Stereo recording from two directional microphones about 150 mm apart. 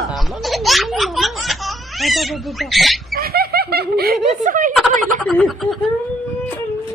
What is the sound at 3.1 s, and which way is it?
Snicker, 90° right.